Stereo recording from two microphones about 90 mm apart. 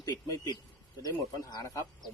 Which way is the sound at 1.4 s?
45° left (ahead or behind).